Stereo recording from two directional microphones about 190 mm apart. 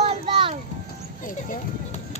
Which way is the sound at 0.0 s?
30° right (ahead or behind).